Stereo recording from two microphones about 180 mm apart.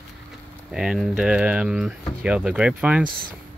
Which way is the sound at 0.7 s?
5° right (ahead or behind).